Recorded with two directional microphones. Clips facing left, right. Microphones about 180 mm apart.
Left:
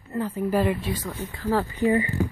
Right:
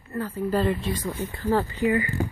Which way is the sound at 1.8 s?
30° left (ahead or behind).